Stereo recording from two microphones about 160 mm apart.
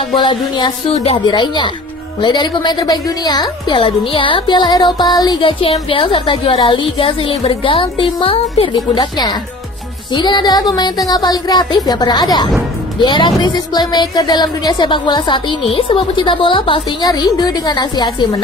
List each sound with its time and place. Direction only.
0.2 s a woman's voice: 30° left (ahead or behind)